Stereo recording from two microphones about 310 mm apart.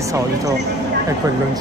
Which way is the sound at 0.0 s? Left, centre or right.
Centre.